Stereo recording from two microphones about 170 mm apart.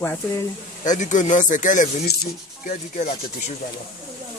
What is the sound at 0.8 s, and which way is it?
A man's voice, 45° left (ahead or behind).